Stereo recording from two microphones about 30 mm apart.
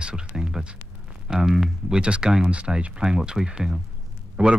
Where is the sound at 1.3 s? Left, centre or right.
Right.